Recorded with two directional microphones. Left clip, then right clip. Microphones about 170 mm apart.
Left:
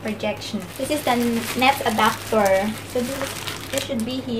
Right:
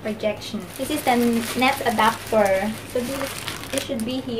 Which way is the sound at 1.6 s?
Centre (ahead or behind).